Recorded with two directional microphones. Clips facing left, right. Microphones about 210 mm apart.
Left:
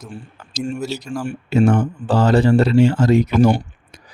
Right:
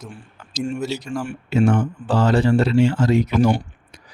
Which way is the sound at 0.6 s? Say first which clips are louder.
Even; 5° left (ahead or behind).